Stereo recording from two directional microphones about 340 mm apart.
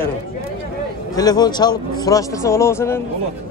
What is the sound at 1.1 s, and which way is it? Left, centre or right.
Speech, centre.